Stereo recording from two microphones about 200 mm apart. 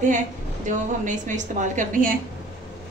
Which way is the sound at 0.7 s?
40° right (ahead or behind).